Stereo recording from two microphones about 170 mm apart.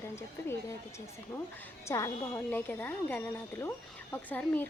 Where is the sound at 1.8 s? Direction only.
15° left (ahead or behind).